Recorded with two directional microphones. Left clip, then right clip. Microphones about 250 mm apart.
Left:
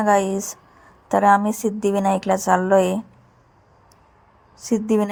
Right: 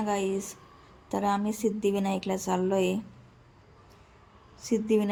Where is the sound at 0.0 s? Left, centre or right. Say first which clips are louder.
Left 11 dB; left.